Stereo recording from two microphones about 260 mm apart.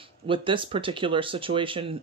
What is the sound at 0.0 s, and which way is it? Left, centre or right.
Speech, centre.